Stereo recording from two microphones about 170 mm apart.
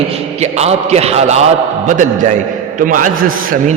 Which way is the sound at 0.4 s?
40° right (ahead or behind).